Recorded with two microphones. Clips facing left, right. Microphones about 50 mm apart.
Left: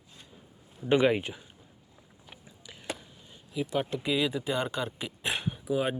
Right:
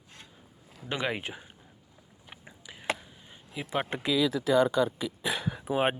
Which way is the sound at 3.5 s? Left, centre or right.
Right.